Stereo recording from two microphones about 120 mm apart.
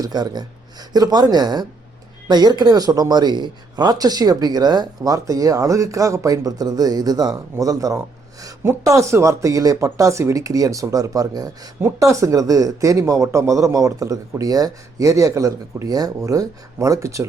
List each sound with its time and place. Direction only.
0.0 s speech: 35° right (ahead or behind)